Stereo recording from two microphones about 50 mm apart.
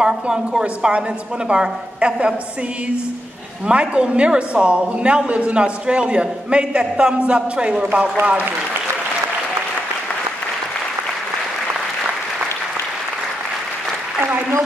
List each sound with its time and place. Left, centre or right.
0.0 s a woman's voice: centre
3.6 s a woman's voice: right